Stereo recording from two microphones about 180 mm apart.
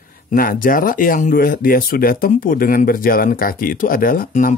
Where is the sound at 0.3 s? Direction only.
50° left (ahead or behind).